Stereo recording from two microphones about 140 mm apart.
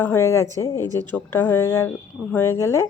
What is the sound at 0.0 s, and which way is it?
A woman's voice, 20° left (ahead or behind).